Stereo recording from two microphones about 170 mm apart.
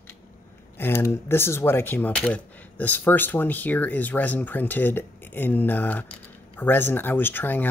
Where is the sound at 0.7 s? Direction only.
15° left (ahead or behind).